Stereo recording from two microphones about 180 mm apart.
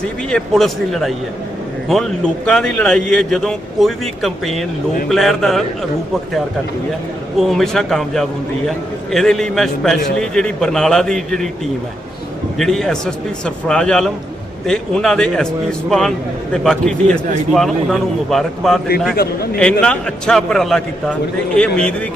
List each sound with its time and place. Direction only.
0.3 s a man's voice: 5° left (ahead or behind)
7.3 s a man's voice: centre (ahead or behind)
12.5 s a man's voice: centre (ahead or behind)
19.1 s a man's voice: 60° left (ahead or behind)
19.8 s a man's voice: 5° left (ahead or behind)